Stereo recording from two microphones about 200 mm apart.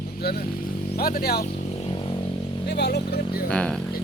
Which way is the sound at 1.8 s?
25° left (ahead or behind).